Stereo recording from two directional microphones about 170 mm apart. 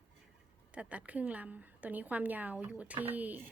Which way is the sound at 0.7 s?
10° right (ahead or behind).